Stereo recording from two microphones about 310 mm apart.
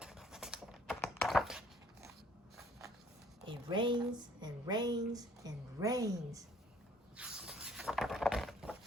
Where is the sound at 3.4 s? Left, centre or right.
Centre.